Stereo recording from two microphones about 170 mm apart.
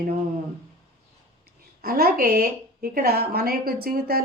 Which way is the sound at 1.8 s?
65° right (ahead or behind).